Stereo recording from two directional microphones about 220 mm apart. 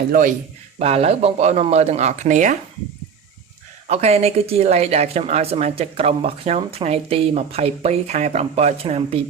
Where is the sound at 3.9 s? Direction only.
30° right (ahead or behind).